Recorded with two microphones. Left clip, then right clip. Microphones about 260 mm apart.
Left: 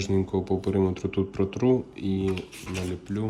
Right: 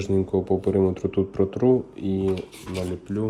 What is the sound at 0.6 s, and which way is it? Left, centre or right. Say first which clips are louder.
Speech: right 4 dB; left.